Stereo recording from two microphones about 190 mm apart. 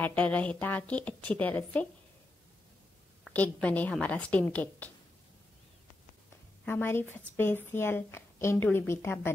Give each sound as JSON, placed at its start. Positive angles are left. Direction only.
{"t": 0.0, "sound": "a woman's voice", "side_deg": 5}
{"t": 3.3, "sound": "a woman's voice", "side_deg": 10}
{"t": 6.6, "sound": "a woman's voice", "side_deg": 10}